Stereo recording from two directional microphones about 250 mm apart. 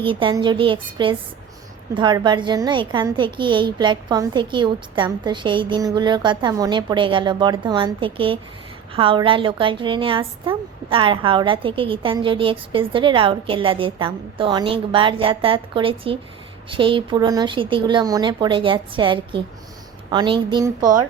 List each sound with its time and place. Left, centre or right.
0.0 s a woman's voice: centre